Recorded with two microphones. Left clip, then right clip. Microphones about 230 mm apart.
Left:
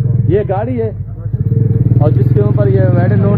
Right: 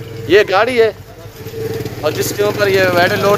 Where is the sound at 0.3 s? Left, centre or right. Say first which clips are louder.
Right 5 dB; centre.